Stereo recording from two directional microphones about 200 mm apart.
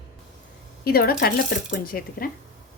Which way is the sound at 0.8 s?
50° left (ahead or behind).